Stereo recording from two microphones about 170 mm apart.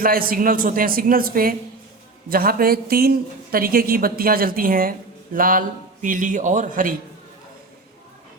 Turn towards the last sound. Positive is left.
turn(degrees=-50)  # may be behind; listen again after turning